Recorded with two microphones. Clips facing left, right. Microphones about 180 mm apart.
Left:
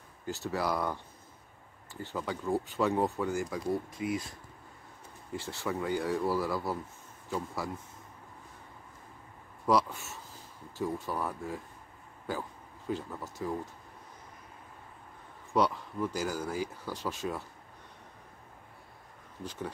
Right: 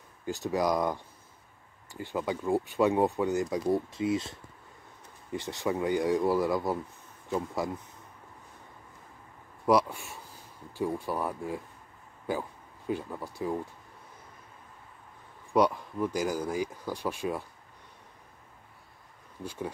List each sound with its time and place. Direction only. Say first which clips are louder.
0.3 s speech: right 4 dB; 15° right (ahead or behind)
9.7 s speech: right 3 dB; 10° right (ahead or behind)
15.5 s speech: right 3 dB; 15° right (ahead or behind)
19.4 s speech: right 3 dB; 10° right (ahead or behind)